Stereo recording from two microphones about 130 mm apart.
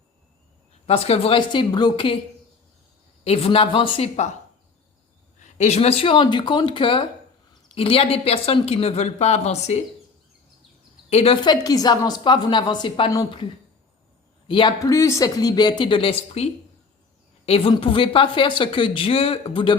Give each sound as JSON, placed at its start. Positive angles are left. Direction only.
{"t": 0.9, "sound": "a woman's voice", "side_deg": 50}
{"t": 3.2, "sound": "a woman's voice", "side_deg": 50}
{"t": 5.4, "sound": "a woman's voice", "side_deg": 60}
{"t": 11.1, "sound": "a woman's voice", "side_deg": 50}
{"t": 11.4, "sound": "a woman's voice", "side_deg": 30}
{"t": 14.4, "sound": "a man's voice", "side_deg": 40}
{"t": 14.8, "sound": "a woman's voice", "side_deg": 25}